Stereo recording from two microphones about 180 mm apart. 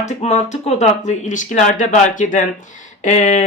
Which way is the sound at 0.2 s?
40° left (ahead or behind).